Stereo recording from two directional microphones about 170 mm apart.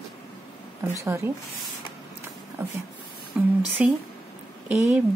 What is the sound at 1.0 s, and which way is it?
Speech, 15° right (ahead or behind).